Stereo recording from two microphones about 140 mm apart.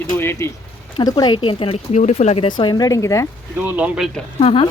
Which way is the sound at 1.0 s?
30° left (ahead or behind).